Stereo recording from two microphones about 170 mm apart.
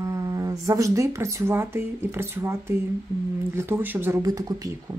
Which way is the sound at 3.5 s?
15° right (ahead or behind).